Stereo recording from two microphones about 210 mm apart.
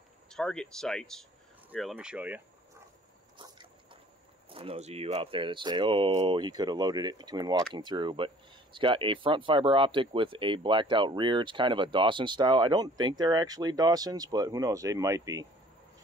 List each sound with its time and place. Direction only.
0.3 s speech: 5° left (ahead or behind)
3.3 s biting: 20° right (ahead or behind)
4.5 s speech: 25° right (ahead or behind)